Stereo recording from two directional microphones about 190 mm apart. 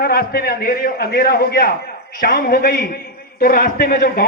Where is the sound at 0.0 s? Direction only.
55° left (ahead or behind).